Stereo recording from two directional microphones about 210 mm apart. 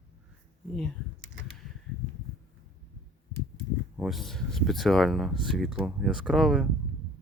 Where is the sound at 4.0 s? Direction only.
Centre (ahead or behind).